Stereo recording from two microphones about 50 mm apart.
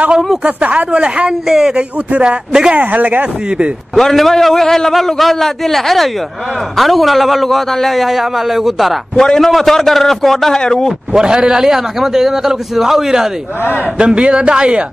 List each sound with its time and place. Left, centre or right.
0.6 s speech: right
1.5 s a man's voice: centre
2.7 s speech: right
3.9 s a man's voice: centre
9.1 s a man's voice: centre
11.1 s a man's voice: centre
13.9 s speech: right